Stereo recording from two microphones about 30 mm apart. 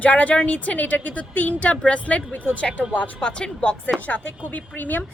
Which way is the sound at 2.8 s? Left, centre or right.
Left.